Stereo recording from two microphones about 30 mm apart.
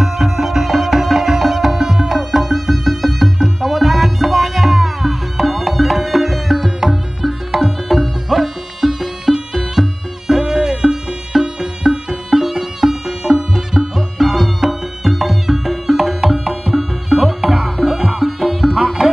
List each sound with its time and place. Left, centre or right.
0.0 s music: centre